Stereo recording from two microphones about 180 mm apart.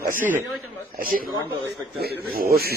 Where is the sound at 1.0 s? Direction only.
55° right (ahead or behind).